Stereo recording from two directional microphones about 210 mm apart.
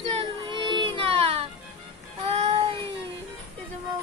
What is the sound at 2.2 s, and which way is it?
Child singing, 30° right (ahead or behind).